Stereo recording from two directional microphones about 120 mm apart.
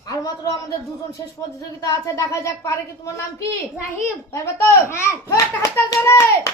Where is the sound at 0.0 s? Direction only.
30° left (ahead or behind).